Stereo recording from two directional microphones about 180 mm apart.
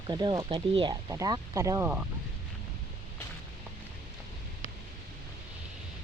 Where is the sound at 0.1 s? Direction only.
25° right (ahead or behind).